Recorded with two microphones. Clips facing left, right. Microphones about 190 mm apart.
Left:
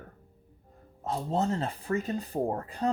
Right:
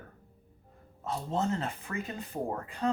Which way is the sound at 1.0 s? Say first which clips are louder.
Left 3 dB; 35° left (ahead or behind).